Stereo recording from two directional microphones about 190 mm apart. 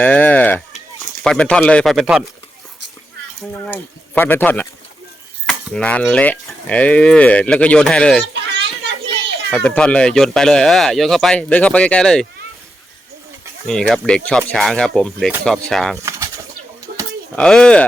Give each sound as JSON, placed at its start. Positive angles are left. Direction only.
{"t": 0.0, "sound": "a sound", "side_deg": 10}
{"t": 1.2, "sound": "speech", "side_deg": 5}
{"t": 4.1, "sound": "speech", "side_deg": 10}
{"t": 8.2, "sound": "children playing", "side_deg": -70}
{"t": 9.5, "sound": "speech", "side_deg": 5}
{"t": 13.7, "sound": "speech", "side_deg": 5}
{"t": 17.3, "sound": "speech", "side_deg": 5}